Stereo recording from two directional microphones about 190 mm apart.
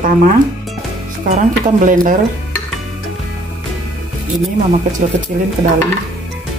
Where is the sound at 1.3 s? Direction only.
40° right (ahead or behind).